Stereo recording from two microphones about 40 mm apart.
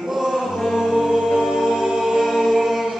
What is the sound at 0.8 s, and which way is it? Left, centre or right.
Music, centre.